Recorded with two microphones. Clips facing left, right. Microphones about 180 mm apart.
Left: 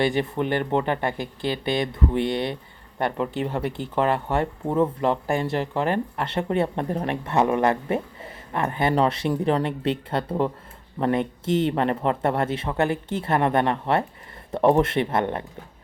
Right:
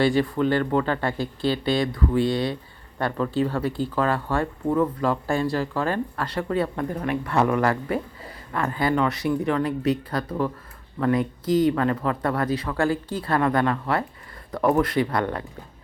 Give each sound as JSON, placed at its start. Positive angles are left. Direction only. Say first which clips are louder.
{"t": 0.0, "sound": "speech", "louder": "right 2 dB", "side_deg": 20}